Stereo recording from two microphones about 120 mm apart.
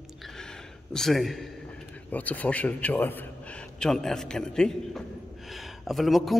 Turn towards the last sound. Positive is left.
turn(degrees=0)  # may be behind; listen again after turning